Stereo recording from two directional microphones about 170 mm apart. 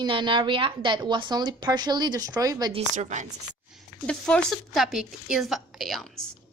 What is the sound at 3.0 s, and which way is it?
Speech, 45° right (ahead or behind).